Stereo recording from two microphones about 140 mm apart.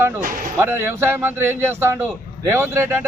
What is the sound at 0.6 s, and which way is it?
A man's voice, 20° right (ahead or behind).